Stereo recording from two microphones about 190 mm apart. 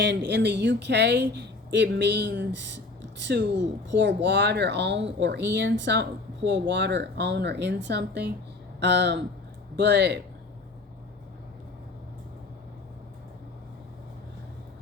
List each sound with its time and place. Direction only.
0.0 s speech: 65° right (ahead or behind)